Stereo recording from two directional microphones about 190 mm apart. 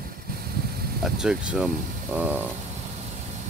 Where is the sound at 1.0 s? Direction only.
5° right (ahead or behind).